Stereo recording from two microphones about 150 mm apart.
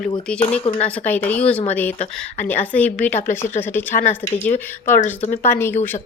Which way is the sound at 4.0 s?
60° left (ahead or behind).